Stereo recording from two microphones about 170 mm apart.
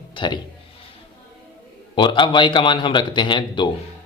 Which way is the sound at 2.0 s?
30° left (ahead or behind).